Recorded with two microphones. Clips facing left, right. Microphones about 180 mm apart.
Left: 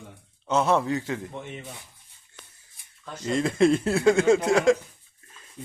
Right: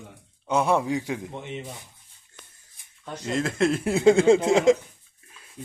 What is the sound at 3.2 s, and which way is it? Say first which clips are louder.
Speech: left 3 dB; centre (ahead or behind).